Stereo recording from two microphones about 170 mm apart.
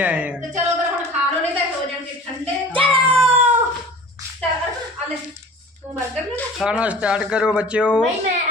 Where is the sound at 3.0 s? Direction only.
5° left (ahead or behind).